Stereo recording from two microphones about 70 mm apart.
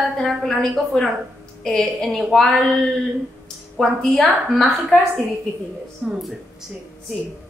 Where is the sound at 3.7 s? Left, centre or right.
Centre.